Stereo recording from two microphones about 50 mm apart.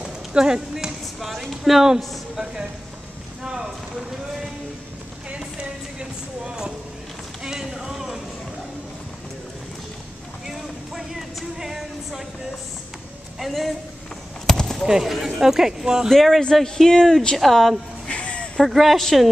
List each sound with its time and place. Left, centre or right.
0.0 s speech: centre
5.9 s speech: centre
10.4 s a sound: centre
13.4 s a man's voice: centre
14.4 s basketball bounce: centre
14.9 s speech: centre
16.1 s a man's voice: centre
18.0 s a sound: left
18.6 s a man's voice: centre